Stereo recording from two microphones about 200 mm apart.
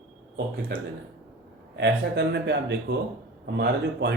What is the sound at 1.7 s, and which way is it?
Speech, 60° right (ahead or behind).